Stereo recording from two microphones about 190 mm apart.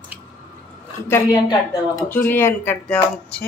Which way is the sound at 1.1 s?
20° left (ahead or behind).